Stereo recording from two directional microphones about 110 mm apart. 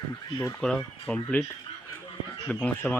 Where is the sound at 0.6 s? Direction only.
10° left (ahead or behind).